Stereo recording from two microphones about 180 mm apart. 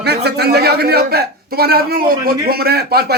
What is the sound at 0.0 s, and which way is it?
A man's voice, 65° right (ahead or behind).